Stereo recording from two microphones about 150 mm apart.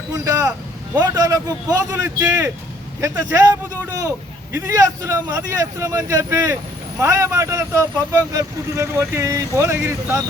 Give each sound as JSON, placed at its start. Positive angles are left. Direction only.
{"t": 0.1, "sound": "a man's voice", "side_deg": -20}